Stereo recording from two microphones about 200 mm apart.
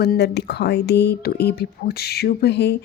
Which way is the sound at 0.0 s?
55° left (ahead or behind).